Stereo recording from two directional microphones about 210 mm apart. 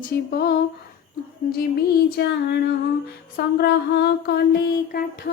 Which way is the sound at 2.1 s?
55° left (ahead or behind).